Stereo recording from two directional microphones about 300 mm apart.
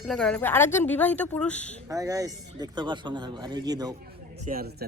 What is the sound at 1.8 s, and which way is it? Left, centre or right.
Speech, centre.